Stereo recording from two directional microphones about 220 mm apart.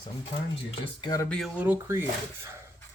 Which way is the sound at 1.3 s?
5° right (ahead or behind).